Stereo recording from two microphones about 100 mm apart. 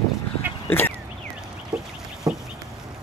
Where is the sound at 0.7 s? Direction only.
20° left (ahead or behind).